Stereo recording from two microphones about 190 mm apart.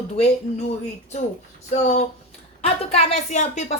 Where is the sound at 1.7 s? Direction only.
40° left (ahead or behind).